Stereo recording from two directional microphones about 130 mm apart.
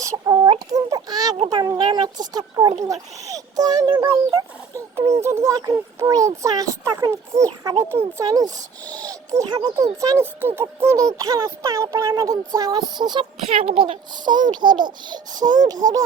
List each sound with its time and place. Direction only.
0.0 s chicken: 30° right (ahead or behind)
0.7 s a child's voice: 30° right (ahead or behind)
4.1 s a child's voice: 20° right (ahead or behind)
13.5 s a woman's voice: 45° right (ahead or behind)
14.1 s a child's voice: 35° right (ahead or behind)
15.4 s a sound: 85° right
15.8 s a child's voice: 30° right (ahead or behind)